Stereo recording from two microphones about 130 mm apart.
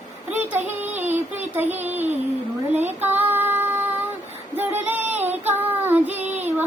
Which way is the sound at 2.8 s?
15° right (ahead or behind).